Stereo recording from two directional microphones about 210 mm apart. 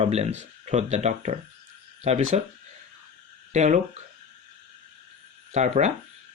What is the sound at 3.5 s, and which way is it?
Speech, 35° right (ahead or behind).